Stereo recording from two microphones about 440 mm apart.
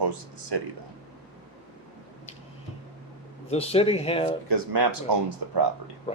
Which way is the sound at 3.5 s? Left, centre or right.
Centre.